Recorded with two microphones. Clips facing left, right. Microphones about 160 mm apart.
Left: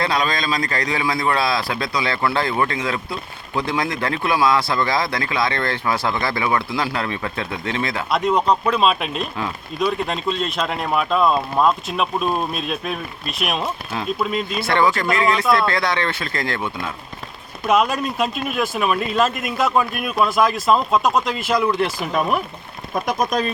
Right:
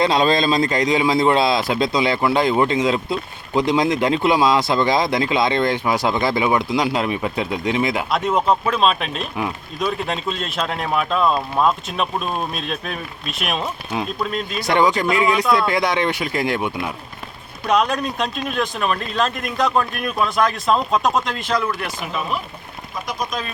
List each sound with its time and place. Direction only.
0.0 s speech: 25° right (ahead or behind)
8.1 s speech: centre (ahead or behind)
14.6 s speech: 15° right (ahead or behind)
17.7 s speech: centre (ahead or behind)
23.0 s speech: 45° left (ahead or behind)